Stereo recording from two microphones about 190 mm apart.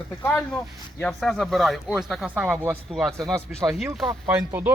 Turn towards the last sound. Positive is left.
turn(degrees=-10)  # may be behind; listen again after turning